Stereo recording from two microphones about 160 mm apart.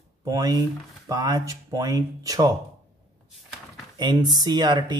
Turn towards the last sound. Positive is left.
turn(degrees=-30)  # may be behind; listen again after turning